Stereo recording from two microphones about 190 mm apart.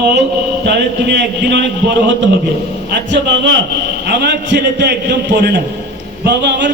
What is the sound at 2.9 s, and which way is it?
A man's voice, 70° right (ahead or behind).